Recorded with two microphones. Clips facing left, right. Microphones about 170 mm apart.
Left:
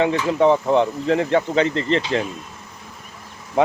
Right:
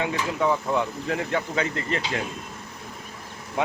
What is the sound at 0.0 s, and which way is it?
Speech, 25° left (ahead or behind).